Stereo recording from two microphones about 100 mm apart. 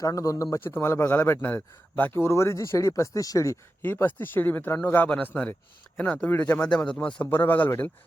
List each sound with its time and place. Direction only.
0.0 s speech: 35° left (ahead or behind)
0.5 s speech: 20° left (ahead or behind)
3.8 s a man's voice: 20° left (ahead or behind)